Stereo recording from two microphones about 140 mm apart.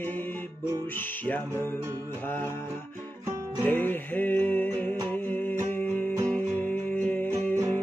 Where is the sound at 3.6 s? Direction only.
15° left (ahead or behind).